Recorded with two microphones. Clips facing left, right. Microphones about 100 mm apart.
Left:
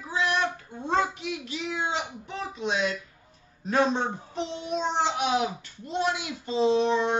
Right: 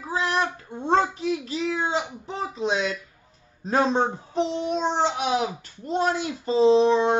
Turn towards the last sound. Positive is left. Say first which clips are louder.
# right 5 dB
turn(degrees=-35)  # may be behind; listen again after turning